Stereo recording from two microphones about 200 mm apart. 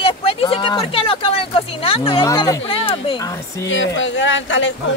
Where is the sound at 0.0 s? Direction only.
30° left (ahead or behind).